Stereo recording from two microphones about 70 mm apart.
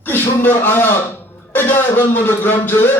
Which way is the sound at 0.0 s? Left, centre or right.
Left.